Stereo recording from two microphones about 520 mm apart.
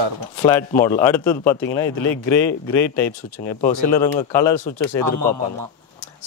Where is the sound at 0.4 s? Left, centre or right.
Centre.